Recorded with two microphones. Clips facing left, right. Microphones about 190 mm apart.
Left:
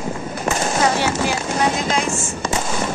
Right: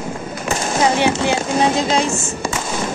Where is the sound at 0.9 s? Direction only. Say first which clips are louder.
Right 3 dB; 20° right (ahead or behind).